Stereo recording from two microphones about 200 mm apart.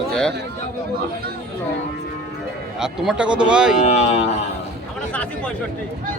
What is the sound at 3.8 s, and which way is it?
Speech, 30° left (ahead or behind).